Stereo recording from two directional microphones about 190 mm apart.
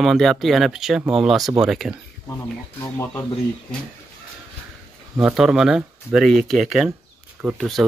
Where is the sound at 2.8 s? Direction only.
15° left (ahead or behind).